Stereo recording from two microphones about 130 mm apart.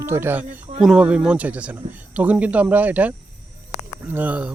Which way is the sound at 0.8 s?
5° right (ahead or behind).